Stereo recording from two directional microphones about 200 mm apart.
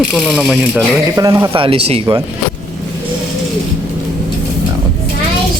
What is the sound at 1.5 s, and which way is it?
Speech, 25° right (ahead or behind).